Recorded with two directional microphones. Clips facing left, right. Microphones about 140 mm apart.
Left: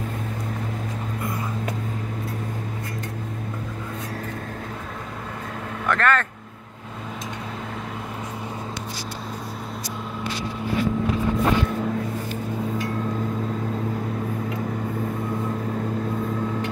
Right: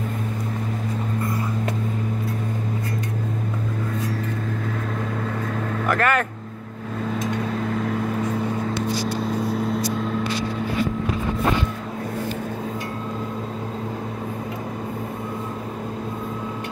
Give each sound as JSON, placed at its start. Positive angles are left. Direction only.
{"t": 5.9, "sound": "speech", "side_deg": -10}